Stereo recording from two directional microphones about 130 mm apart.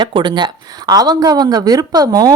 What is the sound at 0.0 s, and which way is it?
Speech, 35° right (ahead or behind).